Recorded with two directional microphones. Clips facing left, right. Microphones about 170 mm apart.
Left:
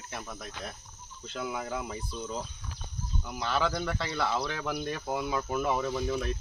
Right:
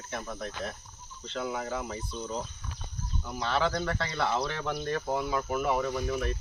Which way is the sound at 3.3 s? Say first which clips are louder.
Right 1 dB; 5° left (ahead or behind).